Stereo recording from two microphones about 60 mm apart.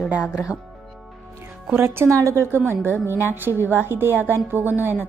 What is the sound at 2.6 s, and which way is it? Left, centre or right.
A woman's voice, right.